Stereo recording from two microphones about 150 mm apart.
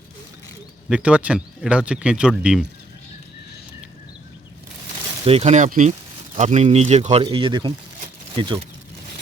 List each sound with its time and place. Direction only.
0.9 s speech: 5° right (ahead or behind)
5.2 s speech: 45° right (ahead or behind)
7.3 s speech: 35° right (ahead or behind)